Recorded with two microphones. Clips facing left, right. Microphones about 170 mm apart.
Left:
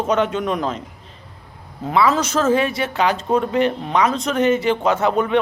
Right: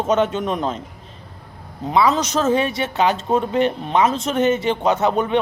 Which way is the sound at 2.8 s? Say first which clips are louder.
Right 1 dB; 25° right (ahead or behind).